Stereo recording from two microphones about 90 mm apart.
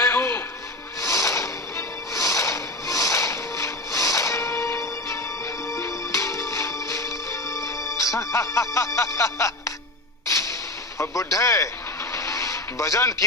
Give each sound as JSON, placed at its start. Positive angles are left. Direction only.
{"t": 0.0, "sound": "music", "side_deg": 30}
{"t": 10.9, "sound": "a man's voice", "side_deg": 35}
{"t": 12.1, "sound": "vehicle", "side_deg": 35}